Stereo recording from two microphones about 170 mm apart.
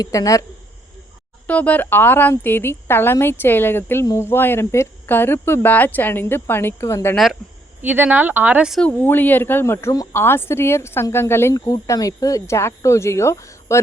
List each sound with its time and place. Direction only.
0.0 s speech: 20° left (ahead or behind)
1.5 s speech: 10° left (ahead or behind)
7.8 s speech: 10° right (ahead or behind)
8.8 s speech: 10° left (ahead or behind)